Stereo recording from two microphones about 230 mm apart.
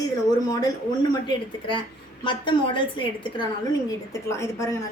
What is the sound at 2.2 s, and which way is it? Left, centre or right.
A woman's voice, left.